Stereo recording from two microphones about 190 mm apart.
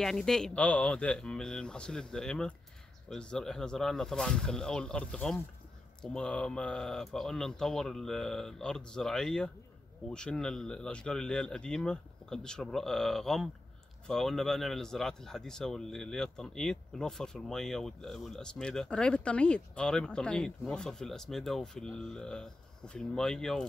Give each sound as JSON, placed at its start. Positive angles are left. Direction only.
{"t": 0.0, "sound": "speech", "side_deg": 0}